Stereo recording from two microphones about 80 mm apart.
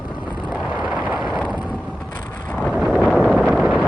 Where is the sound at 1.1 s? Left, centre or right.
Centre.